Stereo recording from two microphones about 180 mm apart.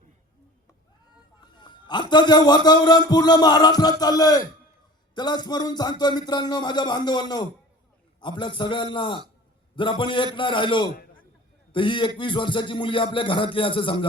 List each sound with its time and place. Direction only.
1.4 s a man's voice: 25° left (ahead or behind)